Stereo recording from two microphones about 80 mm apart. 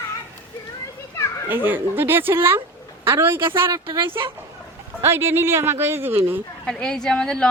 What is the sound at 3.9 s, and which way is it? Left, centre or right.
Speech, right.